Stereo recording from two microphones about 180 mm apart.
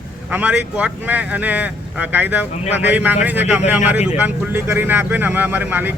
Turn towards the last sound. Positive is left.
turn(degrees=-10)  # may be behind; listen again after turning